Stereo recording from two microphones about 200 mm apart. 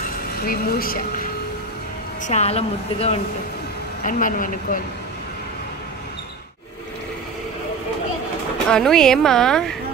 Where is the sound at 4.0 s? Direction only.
40° left (ahead or behind).